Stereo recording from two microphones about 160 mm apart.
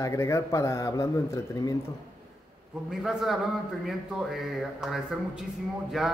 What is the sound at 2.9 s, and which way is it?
Speech, centre (ahead or behind).